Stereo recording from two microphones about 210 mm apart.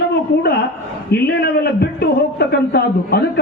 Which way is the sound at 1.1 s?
50° left (ahead or behind).